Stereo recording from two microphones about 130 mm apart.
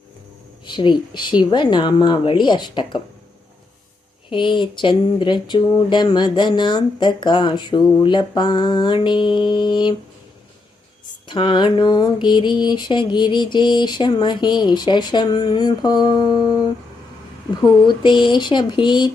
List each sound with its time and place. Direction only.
0.6 s speech: 35° left (ahead or behind)
4.3 s speech: 40° left (ahead or behind)
11.3 s speech: 35° left (ahead or behind)